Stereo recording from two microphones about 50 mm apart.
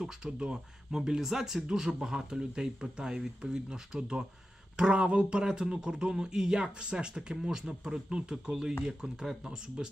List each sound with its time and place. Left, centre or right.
0.0 s speech: centre